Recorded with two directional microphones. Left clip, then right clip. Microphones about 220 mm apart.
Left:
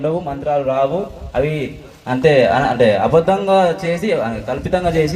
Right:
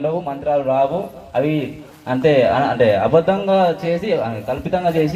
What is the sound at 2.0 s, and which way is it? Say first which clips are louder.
A man's voice: left 2 dB; 55° left (ahead or behind).